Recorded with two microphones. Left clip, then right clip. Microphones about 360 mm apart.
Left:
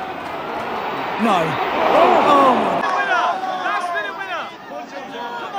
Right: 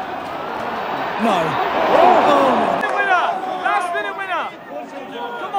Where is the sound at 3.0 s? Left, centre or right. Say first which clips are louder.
Right 1 dB; centre.